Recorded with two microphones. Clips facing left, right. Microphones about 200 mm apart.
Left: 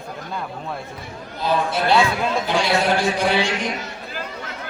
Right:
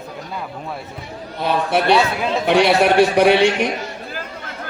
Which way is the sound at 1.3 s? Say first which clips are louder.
Right 3 dB; 65° right (ahead or behind).